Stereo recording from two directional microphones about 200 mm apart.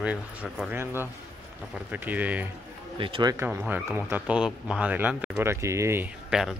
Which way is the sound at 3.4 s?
10° right (ahead or behind).